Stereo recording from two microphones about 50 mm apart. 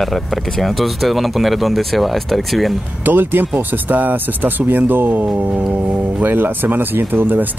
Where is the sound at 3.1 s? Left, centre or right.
Right.